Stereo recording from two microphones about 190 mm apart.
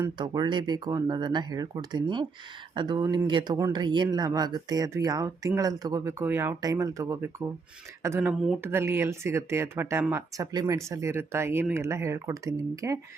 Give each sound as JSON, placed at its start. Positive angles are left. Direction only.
{"t": 0.2, "sound": "speech", "side_deg": -25}